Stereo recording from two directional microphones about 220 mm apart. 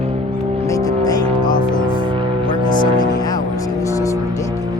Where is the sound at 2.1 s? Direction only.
25° right (ahead or behind).